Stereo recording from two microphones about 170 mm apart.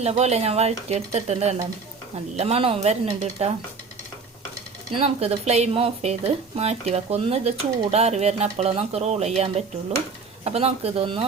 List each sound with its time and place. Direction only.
0.0 s speech: 40° right (ahead or behind)
4.9 s speech: 35° right (ahead or behind)